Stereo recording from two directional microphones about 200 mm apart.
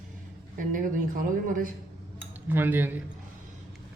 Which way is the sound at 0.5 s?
45° right (ahead or behind).